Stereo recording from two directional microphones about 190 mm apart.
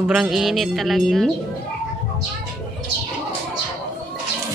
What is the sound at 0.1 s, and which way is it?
Speech, centre (ahead or behind).